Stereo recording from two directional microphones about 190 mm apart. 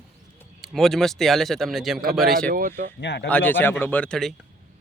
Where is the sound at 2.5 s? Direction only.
50° right (ahead or behind).